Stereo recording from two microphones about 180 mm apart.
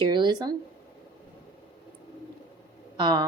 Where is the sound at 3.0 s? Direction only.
25° right (ahead or behind).